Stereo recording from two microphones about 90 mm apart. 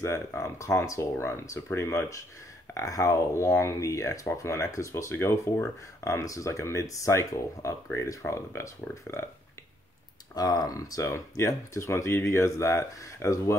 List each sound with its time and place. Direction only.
0.4 s speech: 30° left (ahead or behind)
10.3 s speech: 45° left (ahead or behind)